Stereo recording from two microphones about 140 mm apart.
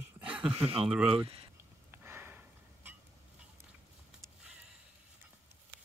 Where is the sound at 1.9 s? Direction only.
15° right (ahead or behind).